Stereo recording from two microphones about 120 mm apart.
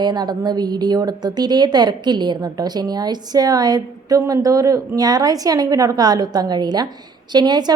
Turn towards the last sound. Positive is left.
turn(degrees=-35)  # may be behind; listen again after turning